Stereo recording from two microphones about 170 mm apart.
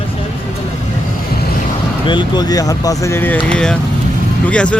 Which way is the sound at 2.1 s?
25° left (ahead or behind).